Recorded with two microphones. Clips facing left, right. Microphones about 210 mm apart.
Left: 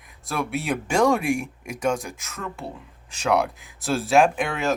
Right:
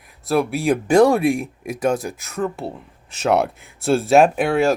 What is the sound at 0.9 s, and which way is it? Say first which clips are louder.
Speech: right 6 dB; 35° right (ahead or behind).